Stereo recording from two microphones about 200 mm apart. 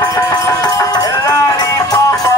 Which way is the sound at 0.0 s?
15° left (ahead or behind).